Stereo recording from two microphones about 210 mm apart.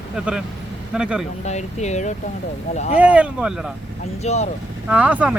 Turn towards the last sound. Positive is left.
turn(degrees=-5)  # may be behind; listen again after turning